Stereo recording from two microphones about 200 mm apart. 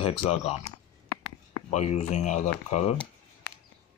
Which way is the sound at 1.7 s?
35° left (ahead or behind).